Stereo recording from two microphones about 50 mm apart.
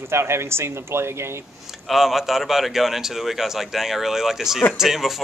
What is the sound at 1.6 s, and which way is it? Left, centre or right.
Speech, centre.